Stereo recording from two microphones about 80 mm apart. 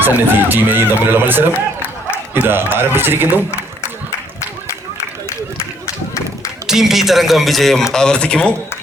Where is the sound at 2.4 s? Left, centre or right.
Right.